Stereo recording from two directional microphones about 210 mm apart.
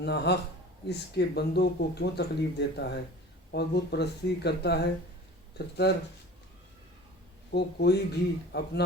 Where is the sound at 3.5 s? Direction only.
50° left (ahead or behind).